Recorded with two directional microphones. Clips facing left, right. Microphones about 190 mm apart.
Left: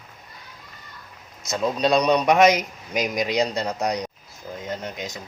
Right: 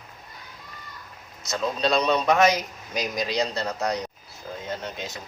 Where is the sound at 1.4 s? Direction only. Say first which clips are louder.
Left 3 dB; 20° left (ahead or behind).